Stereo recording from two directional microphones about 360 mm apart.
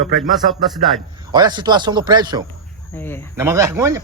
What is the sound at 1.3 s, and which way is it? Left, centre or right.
Speech, centre.